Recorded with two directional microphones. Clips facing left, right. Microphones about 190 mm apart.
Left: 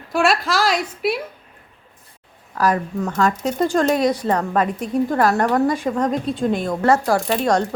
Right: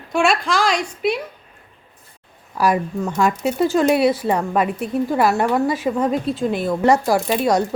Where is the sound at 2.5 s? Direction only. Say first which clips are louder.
Right 1 dB; 10° right (ahead or behind).